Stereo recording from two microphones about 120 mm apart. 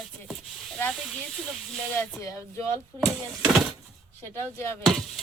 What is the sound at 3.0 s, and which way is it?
Speech, centre (ahead or behind).